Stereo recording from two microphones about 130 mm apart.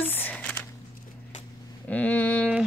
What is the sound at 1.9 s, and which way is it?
Speech, 10° left (ahead or behind).